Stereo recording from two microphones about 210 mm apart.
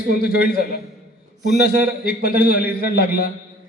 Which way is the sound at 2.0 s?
45° left (ahead or behind).